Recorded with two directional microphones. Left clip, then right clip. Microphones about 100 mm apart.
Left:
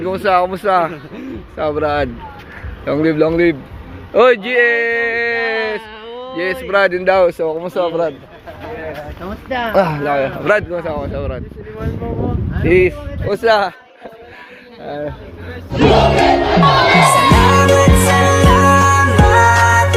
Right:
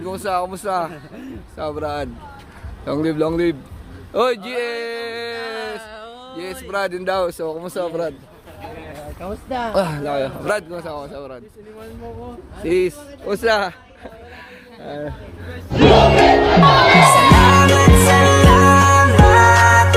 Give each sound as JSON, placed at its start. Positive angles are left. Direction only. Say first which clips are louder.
{"t": 0.0, "sound": "speech", "louder": "left 8 dB", "side_deg": -5}
{"t": 2.8, "sound": "speech", "louder": "left 6 dB", "side_deg": -40}
{"t": 4.5, "sound": "a sound", "louder": "left 11 dB", "side_deg": -20}
{"t": 5.4, "sound": "a sound", "louder": "left 9 dB", "side_deg": 0}
{"t": 6.1, "sound": "a sound", "louder": "left 9 dB", "side_deg": -25}
{"t": 6.3, "sound": "speech", "louder": "left 10 dB", "side_deg": -5}
{"t": 7.5, "sound": "speech", "louder": "left 7 dB", "side_deg": -75}
{"t": 9.7, "sound": "speech", "louder": "left 7 dB", "side_deg": -35}
{"t": 10.4, "sound": "speech", "louder": "left 8 dB", "side_deg": -15}
{"t": 12.6, "sound": "speech", "louder": "left 6 dB", "side_deg": -35}
{"t": 13.2, "sound": "speech", "louder": "left 4 dB", "side_deg": -75}
{"t": 13.5, "sound": "speech", "louder": "left 5 dB", "side_deg": -40}
{"t": 15.7, "sound": "music", "louder": "even", "side_deg": 0}